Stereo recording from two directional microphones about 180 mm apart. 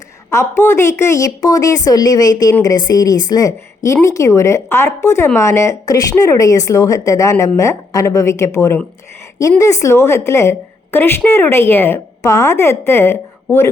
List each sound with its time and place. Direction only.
0.3 s a woman's voice: 15° left (ahead or behind)